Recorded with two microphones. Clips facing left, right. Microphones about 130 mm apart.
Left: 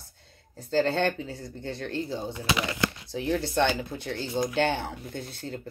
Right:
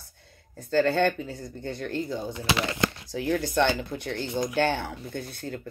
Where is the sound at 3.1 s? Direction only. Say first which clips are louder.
Right 1 dB; 25° left (ahead or behind).